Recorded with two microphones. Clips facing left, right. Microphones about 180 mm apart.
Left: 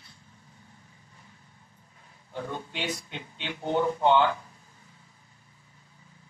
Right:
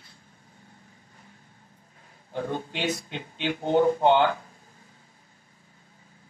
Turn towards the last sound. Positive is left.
turn(degrees=-35)  # may be behind; listen again after turning